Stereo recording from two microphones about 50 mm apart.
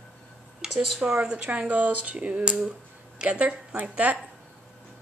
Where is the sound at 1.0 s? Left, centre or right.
Centre.